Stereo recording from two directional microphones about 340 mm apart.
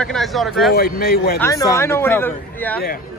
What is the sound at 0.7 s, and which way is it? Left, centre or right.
Speech, left.